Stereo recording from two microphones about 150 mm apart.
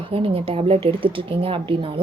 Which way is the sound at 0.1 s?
40° right (ahead or behind).